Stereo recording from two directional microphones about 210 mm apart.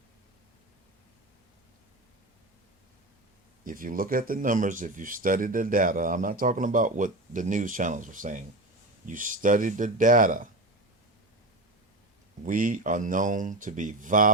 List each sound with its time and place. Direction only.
3.6 s speech: 40° right (ahead or behind)
12.5 s speech: 40° right (ahead or behind)